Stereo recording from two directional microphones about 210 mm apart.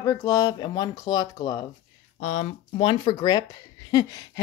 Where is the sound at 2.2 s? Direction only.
35° left (ahead or behind).